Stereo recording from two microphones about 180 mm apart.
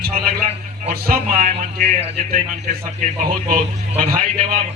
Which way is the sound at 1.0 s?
55° right (ahead or behind).